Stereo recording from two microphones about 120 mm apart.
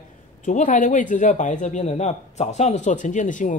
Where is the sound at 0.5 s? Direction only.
90° left.